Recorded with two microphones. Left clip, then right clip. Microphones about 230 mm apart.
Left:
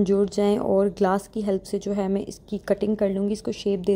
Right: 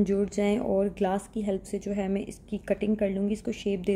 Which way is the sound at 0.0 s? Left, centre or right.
Centre.